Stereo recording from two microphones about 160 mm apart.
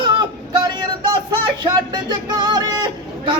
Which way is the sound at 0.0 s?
30° right (ahead or behind).